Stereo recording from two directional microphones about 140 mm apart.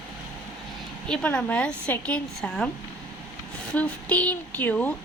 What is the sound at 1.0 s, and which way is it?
A woman's voice, 5° left (ahead or behind).